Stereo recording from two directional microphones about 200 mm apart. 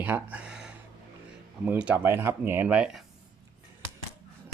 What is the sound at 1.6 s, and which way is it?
Speech, 5° right (ahead or behind).